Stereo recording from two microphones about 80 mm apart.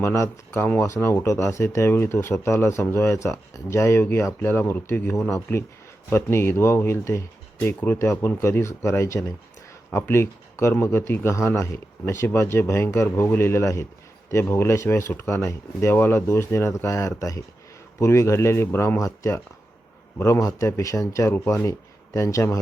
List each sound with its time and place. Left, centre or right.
0.0 s speech: left
18.9 s speech: left
20.1 s speech: left
21.3 s speech: left